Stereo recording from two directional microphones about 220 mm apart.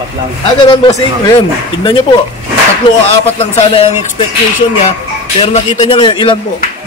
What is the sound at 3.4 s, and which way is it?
Speech, 25° left (ahead or behind).